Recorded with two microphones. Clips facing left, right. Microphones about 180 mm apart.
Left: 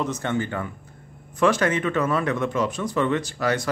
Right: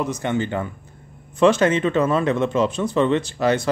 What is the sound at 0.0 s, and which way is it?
Speech, 15° right (ahead or behind).